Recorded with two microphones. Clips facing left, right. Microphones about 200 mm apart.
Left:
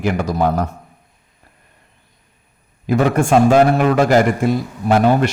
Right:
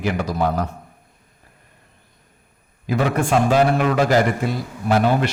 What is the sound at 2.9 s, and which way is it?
A man's voice, 50° left (ahead or behind).